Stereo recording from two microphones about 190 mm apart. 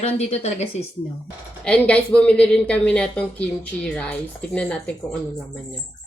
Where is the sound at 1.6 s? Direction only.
5° left (ahead or behind).